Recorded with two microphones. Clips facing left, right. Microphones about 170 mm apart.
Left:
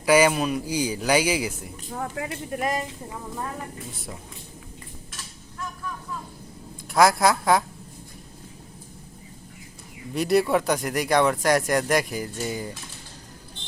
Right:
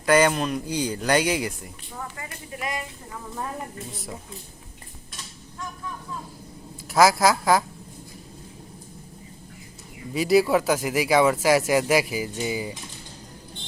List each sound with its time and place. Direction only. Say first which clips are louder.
0.0 s a man's voice: left 1 dB; 10° left (ahead or behind)
2.0 s speech: left 6 dB; 75° left (ahead or behind)
2.5 s speech: left 4 dB; 45° left (ahead or behind)
6.9 s speech: right 1 dB; centre (ahead or behind)
10.2 s speech: right 2 dB; centre (ahead or behind)